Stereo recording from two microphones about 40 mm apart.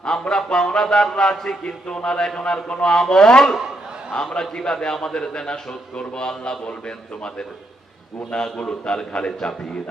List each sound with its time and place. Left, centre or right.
0.0 s a man's voice: centre
8.6 s a man's voice: centre